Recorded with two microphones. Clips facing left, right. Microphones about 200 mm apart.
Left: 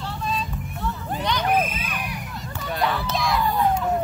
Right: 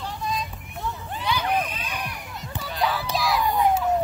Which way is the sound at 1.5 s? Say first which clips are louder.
Left 6 dB; 20° left (ahead or behind).